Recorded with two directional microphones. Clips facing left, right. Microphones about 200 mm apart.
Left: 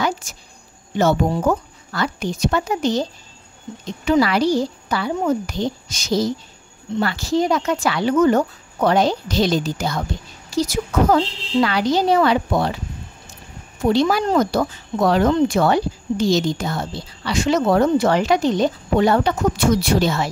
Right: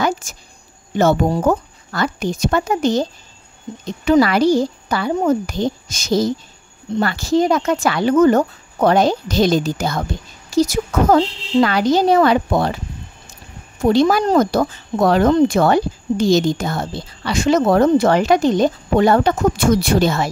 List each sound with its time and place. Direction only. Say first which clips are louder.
0.0 s a sound: right 3 dB; 45° right (ahead or behind)
0.9 s speech: right 2 dB; 50° right (ahead or behind)
13.8 s speech: right 3 dB; 45° right (ahead or behind)